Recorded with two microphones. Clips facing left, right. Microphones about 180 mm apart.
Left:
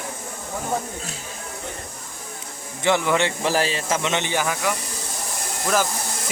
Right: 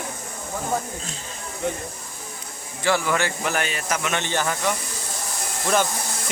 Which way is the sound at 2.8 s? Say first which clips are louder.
Left 2 dB; 20° left (ahead or behind).